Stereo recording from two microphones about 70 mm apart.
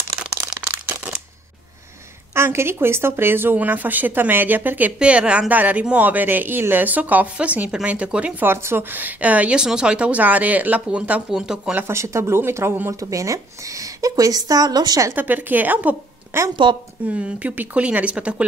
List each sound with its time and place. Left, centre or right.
2.3 s speech: right
4.9 s speech: centre
8.4 s speech: right; by 11.2 s centre
11.2 s speech: centre
11.9 s speech: right
12.9 s speech: right
15.1 s speech: right
16.3 s speech: right
17.1 s speech: centre